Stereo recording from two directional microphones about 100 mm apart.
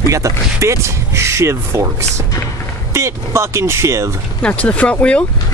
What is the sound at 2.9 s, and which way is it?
Speech, 25° right (ahead or behind).